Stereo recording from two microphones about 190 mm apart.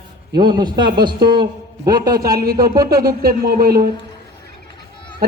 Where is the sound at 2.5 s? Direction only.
20° right (ahead or behind).